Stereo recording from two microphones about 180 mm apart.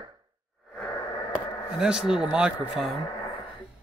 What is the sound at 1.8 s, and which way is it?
Speech, 5° right (ahead or behind).